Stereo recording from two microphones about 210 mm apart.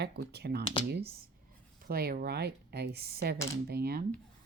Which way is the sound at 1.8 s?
45° right (ahead or behind).